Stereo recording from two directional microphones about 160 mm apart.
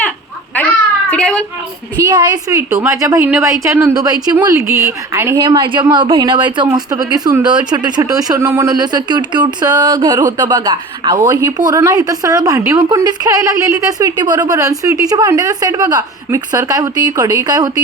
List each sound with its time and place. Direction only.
0.5 s children playing: 10° left (ahead or behind)
1.1 s a sound: 10° left (ahead or behind)
2.0 s speech: 25° right (ahead or behind)
5.5 s speech: 30° right (ahead or behind)